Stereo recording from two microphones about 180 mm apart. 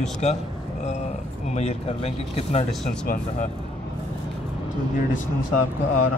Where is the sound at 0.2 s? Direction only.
35° left (ahead or behind).